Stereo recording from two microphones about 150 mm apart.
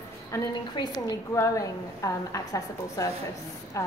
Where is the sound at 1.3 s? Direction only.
20° left (ahead or behind).